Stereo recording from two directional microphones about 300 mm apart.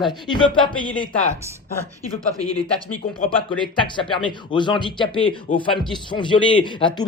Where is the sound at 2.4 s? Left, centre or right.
Centre.